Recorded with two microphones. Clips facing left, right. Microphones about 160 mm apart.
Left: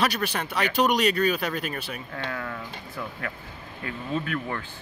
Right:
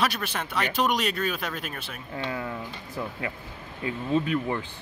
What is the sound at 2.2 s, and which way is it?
Speech, 20° right (ahead or behind).